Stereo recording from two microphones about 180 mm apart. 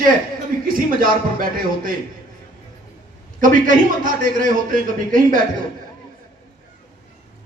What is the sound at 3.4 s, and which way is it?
A man's voice, 50° right (ahead or behind).